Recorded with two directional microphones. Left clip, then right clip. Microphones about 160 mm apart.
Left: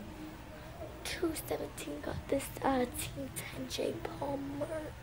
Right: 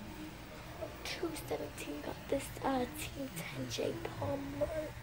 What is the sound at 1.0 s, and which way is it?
Speech, 40° left (ahead or behind).